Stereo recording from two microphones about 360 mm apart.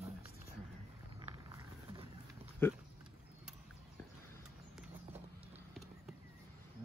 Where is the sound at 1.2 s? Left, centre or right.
Centre.